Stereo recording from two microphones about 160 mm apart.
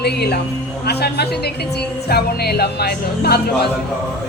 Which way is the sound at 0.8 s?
90° left.